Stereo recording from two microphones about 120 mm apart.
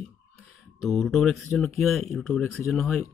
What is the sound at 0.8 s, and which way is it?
Speech, 5° left (ahead or behind).